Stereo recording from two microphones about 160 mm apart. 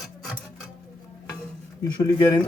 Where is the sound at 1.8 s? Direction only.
25° left (ahead or behind).